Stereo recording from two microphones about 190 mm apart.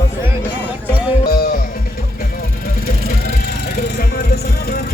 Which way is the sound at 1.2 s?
55° left (ahead or behind).